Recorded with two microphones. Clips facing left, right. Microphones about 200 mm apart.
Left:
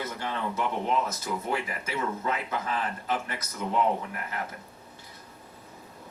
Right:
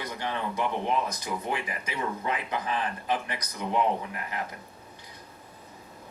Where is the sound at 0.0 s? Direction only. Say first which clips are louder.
Even; 15° right (ahead or behind).